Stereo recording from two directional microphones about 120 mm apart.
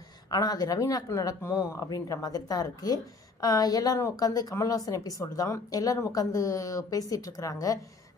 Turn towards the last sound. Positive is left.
turn(degrees=30)  # may be behind; listen again after turning